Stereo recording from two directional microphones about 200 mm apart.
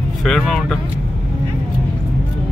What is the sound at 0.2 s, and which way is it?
Speech, centre (ahead or behind).